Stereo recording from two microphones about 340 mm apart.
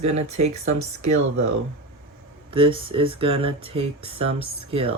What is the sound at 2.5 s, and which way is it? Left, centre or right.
Speech, centre.